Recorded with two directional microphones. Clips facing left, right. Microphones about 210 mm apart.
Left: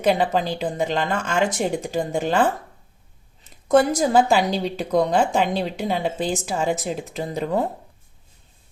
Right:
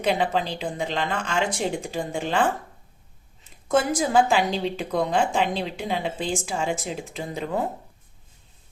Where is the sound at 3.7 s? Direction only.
40° left (ahead or behind).